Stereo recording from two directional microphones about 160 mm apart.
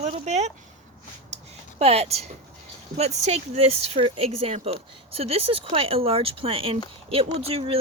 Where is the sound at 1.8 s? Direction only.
40° right (ahead or behind).